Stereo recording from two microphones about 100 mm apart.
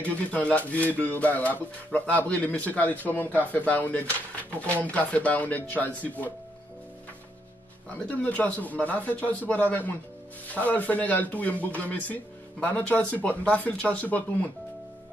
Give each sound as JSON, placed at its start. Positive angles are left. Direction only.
{"t": 0.3, "sound": "speech", "side_deg": 15}
{"t": 8.1, "sound": "speech", "side_deg": 15}